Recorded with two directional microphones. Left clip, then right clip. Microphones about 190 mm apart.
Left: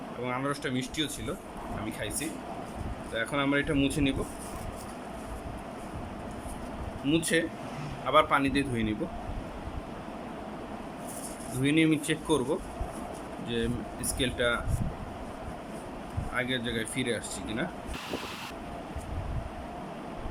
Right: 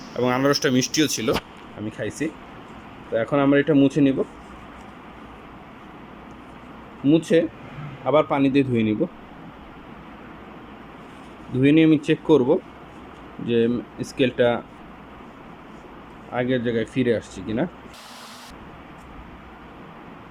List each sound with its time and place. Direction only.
0.2 s speech: 40° right (ahead or behind)
7.1 s speech: 30° right (ahead or behind)
11.6 s speech: 30° right (ahead or behind)
16.3 s speech: 30° right (ahead or behind)